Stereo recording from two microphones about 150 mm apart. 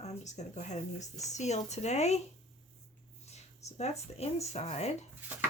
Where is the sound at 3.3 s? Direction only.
45° left (ahead or behind).